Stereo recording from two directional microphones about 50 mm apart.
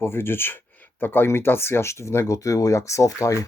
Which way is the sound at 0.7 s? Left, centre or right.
Left.